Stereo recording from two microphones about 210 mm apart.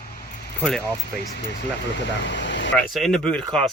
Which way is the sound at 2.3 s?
60° left (ahead or behind).